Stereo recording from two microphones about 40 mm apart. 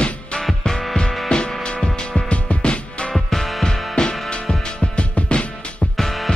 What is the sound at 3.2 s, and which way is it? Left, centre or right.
Music, centre.